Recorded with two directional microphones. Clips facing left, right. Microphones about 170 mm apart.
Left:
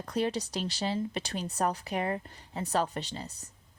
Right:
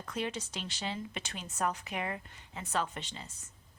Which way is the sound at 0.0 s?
35° left (ahead or behind).